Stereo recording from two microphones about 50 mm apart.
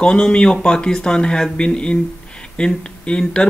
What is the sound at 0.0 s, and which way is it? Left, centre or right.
Speech, centre.